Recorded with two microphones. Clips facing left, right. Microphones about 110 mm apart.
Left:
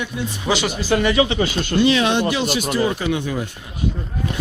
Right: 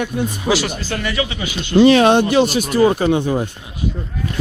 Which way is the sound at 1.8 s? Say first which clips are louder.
Right 7 dB; 50° right (ahead or behind).